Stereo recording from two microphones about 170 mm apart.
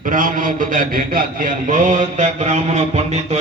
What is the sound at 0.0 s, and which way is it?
A man's voice, 50° right (ahead or behind).